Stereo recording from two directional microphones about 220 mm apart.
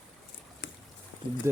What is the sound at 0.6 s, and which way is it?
Boat, 55° left (ahead or behind).